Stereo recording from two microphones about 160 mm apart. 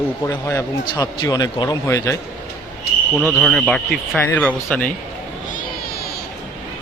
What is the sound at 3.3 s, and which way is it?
A man's voice, 5° left (ahead or behind).